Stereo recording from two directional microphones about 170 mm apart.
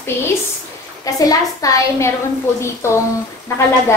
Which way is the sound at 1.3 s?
20° left (ahead or behind).